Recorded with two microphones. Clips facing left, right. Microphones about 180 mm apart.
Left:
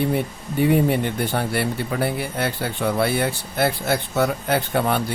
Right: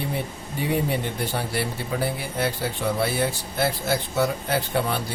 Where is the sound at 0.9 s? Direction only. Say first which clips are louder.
Left 5 dB; 60° left (ahead or behind).